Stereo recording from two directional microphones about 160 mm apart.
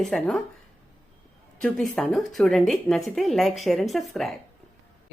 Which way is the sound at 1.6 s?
Centre (ahead or behind).